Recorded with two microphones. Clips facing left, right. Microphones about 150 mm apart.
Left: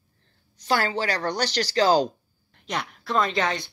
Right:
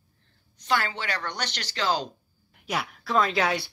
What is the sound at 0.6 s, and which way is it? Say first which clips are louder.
Speech: left 4 dB; 35° left (ahead or behind).